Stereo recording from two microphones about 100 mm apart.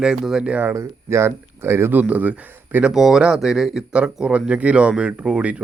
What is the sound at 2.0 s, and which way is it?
Speech, 15° right (ahead or behind).